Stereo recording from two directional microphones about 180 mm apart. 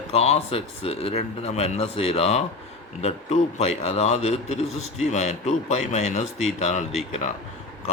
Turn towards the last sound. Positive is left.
turn(degrees=45)  # may be behind; listen again after turning